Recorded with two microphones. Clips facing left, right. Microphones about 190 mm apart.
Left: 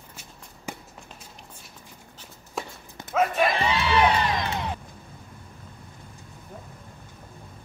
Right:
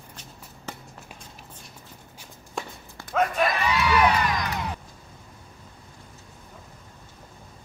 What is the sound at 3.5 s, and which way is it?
Crowd, 25° left (ahead or behind).